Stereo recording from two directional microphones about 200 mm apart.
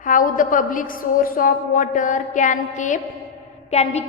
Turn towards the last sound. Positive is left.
turn(degrees=35)  # may be behind; listen again after turning